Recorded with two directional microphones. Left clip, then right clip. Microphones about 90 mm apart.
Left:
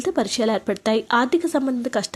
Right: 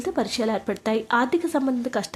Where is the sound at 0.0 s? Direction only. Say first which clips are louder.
Left 3 dB; 30° left (ahead or behind).